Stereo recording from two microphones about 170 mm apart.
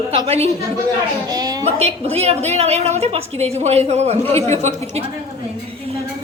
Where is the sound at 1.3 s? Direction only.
20° right (ahead or behind).